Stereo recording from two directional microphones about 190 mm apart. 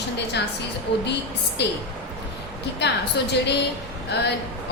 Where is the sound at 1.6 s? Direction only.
65° left (ahead or behind).